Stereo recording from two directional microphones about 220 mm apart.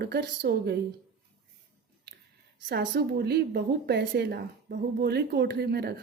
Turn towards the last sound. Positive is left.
turn(degrees=-45)  # may be behind; listen again after turning